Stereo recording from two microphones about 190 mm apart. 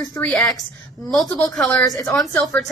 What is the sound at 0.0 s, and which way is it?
A woman's voice, centre (ahead or behind).